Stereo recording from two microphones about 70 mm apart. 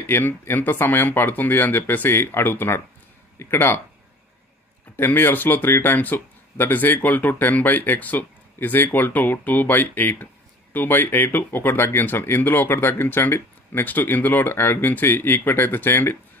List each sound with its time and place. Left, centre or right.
0.0 s speech: left
4.9 s speech: left